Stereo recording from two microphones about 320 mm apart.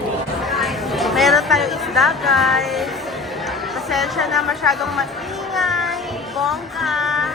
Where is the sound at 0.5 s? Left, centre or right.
Centre.